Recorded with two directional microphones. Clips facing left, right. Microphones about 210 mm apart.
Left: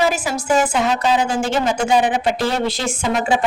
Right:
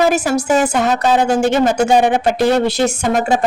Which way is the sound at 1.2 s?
70° right (ahead or behind).